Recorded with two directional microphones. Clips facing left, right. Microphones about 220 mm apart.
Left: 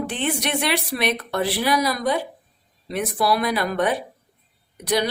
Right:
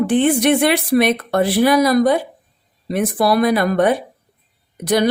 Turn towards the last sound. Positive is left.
turn(degrees=-50)  # may be behind; listen again after turning